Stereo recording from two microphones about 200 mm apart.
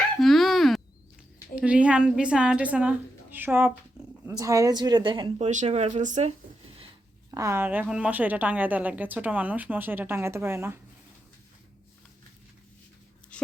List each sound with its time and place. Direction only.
0.2 s a sound: centre (ahead or behind)
1.5 s a woman's voice: 5° right (ahead or behind)
4.0 s purr: 5° right (ahead or behind)
4.3 s speech: 15° right (ahead or behind)
5.5 s speech: 35° right (ahead or behind)
7.3 s a woman's voice: 15° right (ahead or behind)
13.3 s a sound: 5° left (ahead or behind)